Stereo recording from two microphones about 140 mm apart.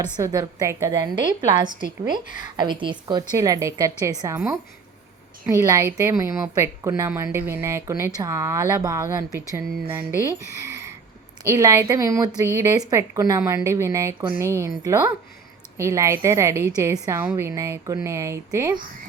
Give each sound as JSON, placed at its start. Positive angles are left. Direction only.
{"t": 0.2, "sound": "a woman's voice", "side_deg": -25}
{"t": 5.5, "sound": "a woman's voice", "side_deg": -25}
{"t": 10.6, "sound": "a sound", "side_deg": -20}
{"t": 11.4, "sound": "a woman's voice", "side_deg": -20}